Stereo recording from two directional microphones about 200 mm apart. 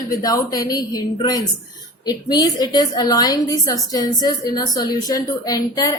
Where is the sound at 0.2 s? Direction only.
20° left (ahead or behind).